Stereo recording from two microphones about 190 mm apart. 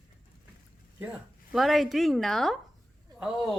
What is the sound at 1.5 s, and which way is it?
A woman's voice, centre (ahead or behind).